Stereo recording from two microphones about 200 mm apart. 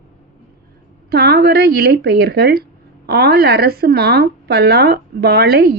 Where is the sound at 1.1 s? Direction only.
55° right (ahead or behind).